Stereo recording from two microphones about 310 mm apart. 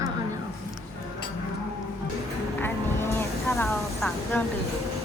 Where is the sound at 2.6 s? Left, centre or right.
Centre.